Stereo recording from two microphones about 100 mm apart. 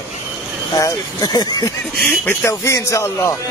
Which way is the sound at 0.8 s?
40° left (ahead or behind).